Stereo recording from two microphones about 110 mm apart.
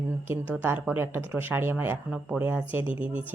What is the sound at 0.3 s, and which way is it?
A woman's voice, 15° right (ahead or behind).